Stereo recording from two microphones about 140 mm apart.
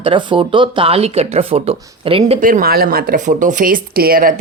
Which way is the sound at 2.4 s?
85° right.